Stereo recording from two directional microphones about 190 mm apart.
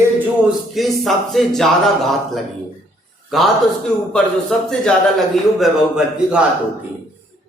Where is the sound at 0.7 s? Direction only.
Centre (ahead or behind).